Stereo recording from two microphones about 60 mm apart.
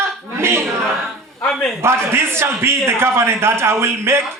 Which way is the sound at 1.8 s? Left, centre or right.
Right.